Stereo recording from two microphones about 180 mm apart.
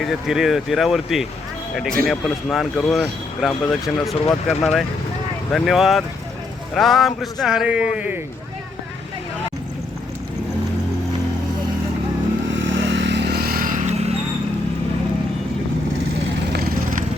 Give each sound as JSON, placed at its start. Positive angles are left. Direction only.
{"t": 0.0, "sound": "speech", "side_deg": 0}
{"t": 12.6, "sound": "vehicle", "side_deg": -90}
{"t": 16.5, "sound": "vehicle", "side_deg": -55}